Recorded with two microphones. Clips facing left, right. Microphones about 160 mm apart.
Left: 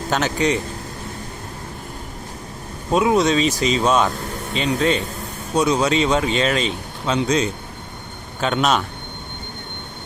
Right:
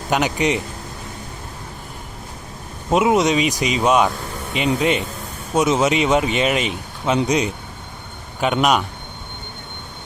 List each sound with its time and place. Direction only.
0.1 s speech: 15° right (ahead or behind)
2.9 s speech: 20° right (ahead or behind)